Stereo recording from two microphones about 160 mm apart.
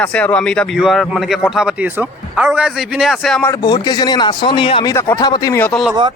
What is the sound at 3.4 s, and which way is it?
A man's voice, 25° left (ahead or behind).